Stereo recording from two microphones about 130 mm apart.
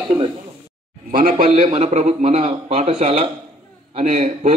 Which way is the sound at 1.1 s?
90° right.